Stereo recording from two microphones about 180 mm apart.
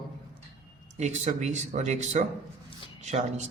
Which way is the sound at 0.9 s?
40° right (ahead or behind).